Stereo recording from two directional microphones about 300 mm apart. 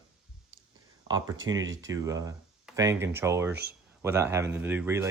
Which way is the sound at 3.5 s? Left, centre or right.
Right.